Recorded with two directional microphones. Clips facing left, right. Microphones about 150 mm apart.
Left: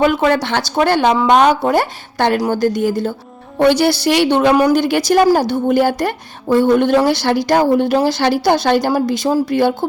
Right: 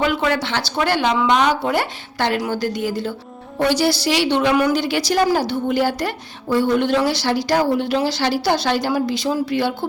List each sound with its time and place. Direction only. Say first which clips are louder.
0.0 s a woman's voice: left 6 dB; 50° left (ahead or behind)
3.6 s a woman's voice: left 5 dB; 60° left (ahead or behind)